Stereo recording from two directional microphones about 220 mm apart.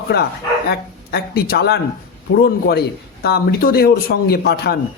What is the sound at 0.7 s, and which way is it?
A man's voice, 45° left (ahead or behind).